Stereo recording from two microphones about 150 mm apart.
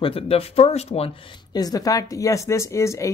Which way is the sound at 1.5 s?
25° left (ahead or behind).